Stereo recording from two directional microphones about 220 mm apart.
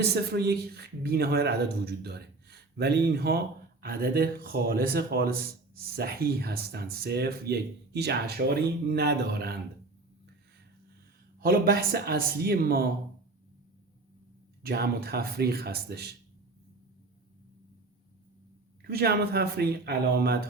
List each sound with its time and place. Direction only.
0.0 s speech: 45° right (ahead or behind)
11.3 s speech: 40° right (ahead or behind)
14.6 s speech: 45° right (ahead or behind)
18.8 s speech: 45° right (ahead or behind)